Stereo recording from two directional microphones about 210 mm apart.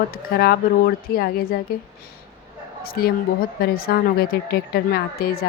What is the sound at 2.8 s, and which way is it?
Speech, 45° left (ahead or behind).